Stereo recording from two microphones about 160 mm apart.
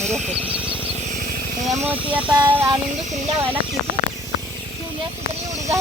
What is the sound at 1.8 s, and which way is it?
Speech, 10° right (ahead or behind).